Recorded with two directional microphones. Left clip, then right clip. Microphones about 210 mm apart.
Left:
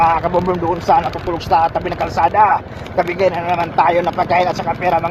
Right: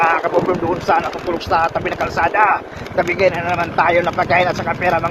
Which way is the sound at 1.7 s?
15° left (ahead or behind).